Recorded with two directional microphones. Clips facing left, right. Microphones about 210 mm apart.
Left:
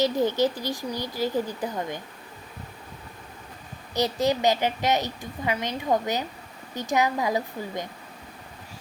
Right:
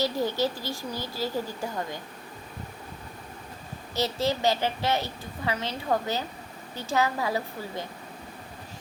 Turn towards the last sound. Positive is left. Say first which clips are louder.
# left 3 dB
turn(degrees=15)  # may be behind; listen again after turning